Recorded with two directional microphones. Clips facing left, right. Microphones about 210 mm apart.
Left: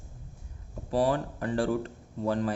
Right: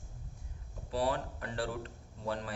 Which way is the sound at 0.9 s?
45° left (ahead or behind).